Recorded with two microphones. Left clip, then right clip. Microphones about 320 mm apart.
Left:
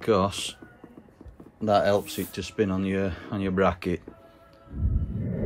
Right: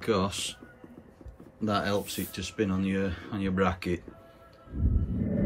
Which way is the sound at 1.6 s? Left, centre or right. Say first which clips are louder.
Left 7 dB; centre.